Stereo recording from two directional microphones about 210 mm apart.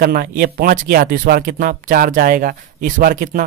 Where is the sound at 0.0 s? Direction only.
45° right (ahead or behind).